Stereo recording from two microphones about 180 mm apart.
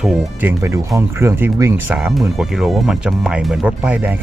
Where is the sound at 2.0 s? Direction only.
Centre (ahead or behind).